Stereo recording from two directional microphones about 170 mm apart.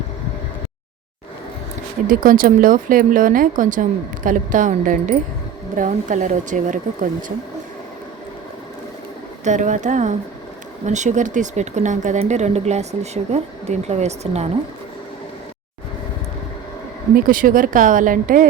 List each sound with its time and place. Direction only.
2.0 s speech: 55° right (ahead or behind)
9.4 s speech: 45° right (ahead or behind)
17.2 s speech: 55° right (ahead or behind)